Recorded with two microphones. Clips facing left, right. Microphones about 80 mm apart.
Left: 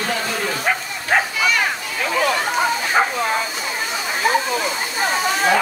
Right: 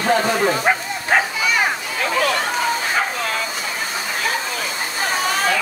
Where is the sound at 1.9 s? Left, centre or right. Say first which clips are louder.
Left 1 dB; centre.